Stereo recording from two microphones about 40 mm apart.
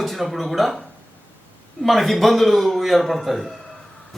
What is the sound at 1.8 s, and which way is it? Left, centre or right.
A man's voice, centre.